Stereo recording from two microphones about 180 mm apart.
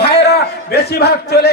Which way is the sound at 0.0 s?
60° left (ahead or behind).